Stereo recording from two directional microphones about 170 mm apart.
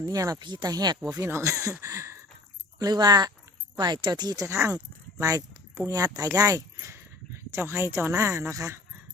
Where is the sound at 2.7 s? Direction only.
20° right (ahead or behind).